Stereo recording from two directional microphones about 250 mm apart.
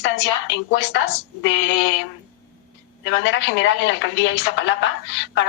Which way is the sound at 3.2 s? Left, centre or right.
Left.